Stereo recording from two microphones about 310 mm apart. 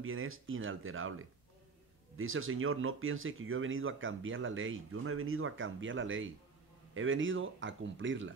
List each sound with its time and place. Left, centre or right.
0.0 s speech: right